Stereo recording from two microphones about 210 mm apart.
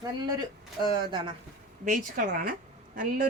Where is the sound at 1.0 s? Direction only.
20° right (ahead or behind).